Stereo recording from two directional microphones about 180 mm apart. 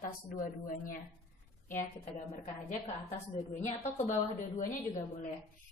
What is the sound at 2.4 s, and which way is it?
Speech, 40° left (ahead or behind).